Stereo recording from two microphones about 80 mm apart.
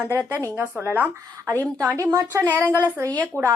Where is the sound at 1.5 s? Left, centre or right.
Right.